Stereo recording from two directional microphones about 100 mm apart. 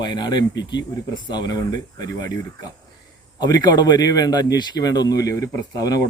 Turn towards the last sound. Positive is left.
turn(degrees=35)  # may be behind; listen again after turning